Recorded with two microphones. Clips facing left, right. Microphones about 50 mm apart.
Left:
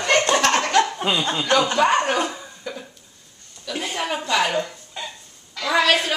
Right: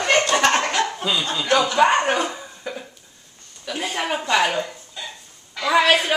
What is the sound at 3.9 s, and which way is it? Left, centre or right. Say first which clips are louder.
A woman's voice: right 2 dB; centre.